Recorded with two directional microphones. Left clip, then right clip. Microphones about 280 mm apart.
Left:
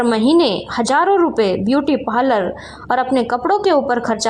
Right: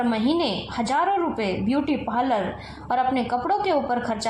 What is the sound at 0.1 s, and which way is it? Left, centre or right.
A woman's voice, left.